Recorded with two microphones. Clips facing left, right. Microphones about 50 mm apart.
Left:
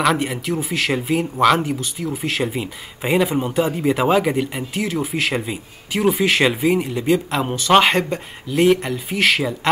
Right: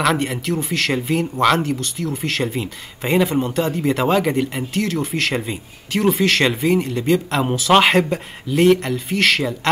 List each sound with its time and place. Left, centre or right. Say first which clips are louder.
0.0 s speech: even; centre